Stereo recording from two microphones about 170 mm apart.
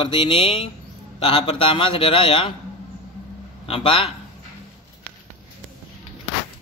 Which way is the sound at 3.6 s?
30° left (ahead or behind).